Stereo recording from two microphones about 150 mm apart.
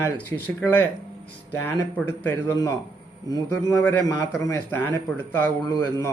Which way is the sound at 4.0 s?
25° left (ahead or behind).